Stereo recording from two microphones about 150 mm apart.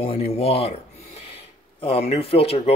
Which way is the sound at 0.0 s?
45° left (ahead or behind).